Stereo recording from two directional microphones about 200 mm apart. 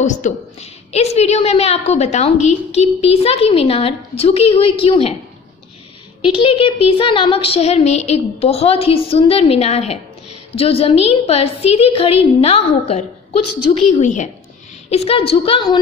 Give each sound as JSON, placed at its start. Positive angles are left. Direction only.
{"t": 0.0, "sound": "a woman's voice", "side_deg": 35}
{"t": 6.2, "sound": "a woman's voice", "side_deg": 25}